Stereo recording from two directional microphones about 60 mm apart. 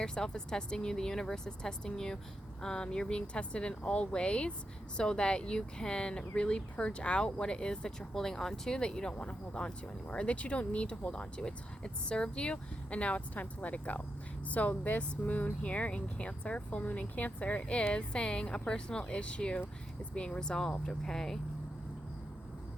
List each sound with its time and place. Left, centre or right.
0.0 s speech: centre